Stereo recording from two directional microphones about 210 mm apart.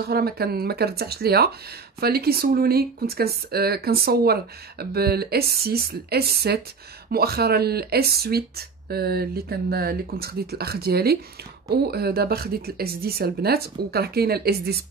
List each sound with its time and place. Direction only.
0.0 s speech: 50° right (ahead or behind)